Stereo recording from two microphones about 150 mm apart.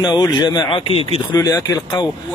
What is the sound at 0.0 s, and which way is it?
Speech, 30° left (ahead or behind).